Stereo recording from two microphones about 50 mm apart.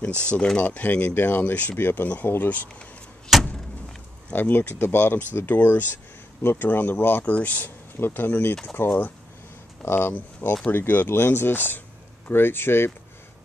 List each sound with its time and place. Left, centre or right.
0.2 s speech: left
1.8 s speech: left
2.5 s speech: left
3.3 s vehicle: centre
4.3 s speech: left
7.2 s speech: left
8.0 s speech: left